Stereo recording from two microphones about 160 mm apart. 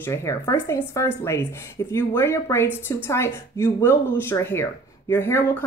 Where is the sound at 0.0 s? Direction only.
15° left (ahead or behind).